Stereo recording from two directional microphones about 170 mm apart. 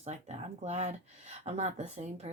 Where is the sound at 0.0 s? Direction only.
40° right (ahead or behind).